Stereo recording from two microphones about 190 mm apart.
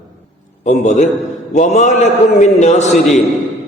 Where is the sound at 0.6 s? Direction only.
40° left (ahead or behind).